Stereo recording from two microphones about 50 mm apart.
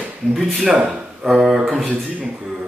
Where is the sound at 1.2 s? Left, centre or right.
Centre.